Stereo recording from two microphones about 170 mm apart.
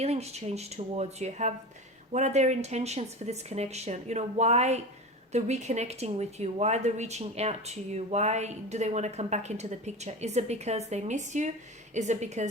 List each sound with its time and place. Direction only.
0.0 s a woman's voice: 40° right (ahead or behind)